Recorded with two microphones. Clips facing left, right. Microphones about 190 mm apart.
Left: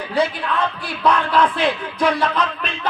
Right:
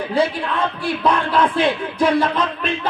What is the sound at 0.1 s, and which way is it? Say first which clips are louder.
A man's voice: even; 25° right (ahead or behind).